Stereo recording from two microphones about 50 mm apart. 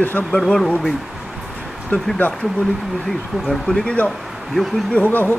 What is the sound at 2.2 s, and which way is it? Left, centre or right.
Speech, left.